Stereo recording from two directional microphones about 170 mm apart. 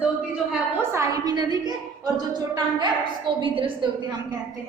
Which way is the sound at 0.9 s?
20° right (ahead or behind).